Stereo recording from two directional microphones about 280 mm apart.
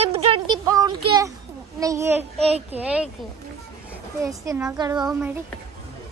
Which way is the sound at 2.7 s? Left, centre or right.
Centre.